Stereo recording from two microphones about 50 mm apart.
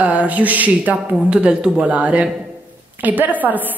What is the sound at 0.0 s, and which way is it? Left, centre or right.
Speech, right.